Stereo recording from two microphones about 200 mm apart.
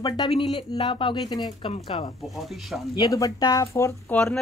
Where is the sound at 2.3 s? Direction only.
Centre (ahead or behind).